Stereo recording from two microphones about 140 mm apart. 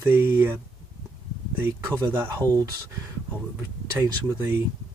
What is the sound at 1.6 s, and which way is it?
Speech, 20° right (ahead or behind).